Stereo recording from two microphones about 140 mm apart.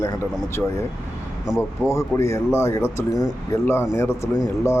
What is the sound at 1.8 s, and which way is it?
Speech, 20° left (ahead or behind).